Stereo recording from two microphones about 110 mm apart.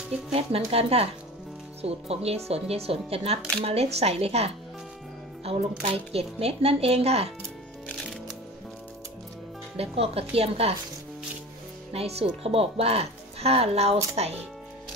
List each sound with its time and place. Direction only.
0.3 s a woman's voice: 65° right (ahead or behind)
9.8 s a woman's voice: 65° right (ahead or behind)
11.9 s speech: 65° right (ahead or behind)